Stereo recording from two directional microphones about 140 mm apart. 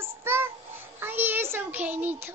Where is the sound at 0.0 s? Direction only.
15° right (ahead or behind).